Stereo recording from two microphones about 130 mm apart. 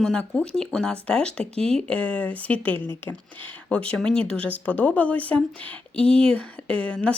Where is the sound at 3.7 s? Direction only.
10° left (ahead or behind).